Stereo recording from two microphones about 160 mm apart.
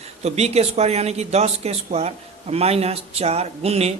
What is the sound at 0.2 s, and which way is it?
A man's voice, 40° right (ahead or behind).